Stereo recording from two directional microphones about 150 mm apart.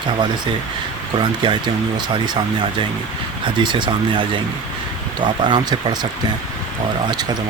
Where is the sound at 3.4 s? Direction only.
30° right (ahead or behind).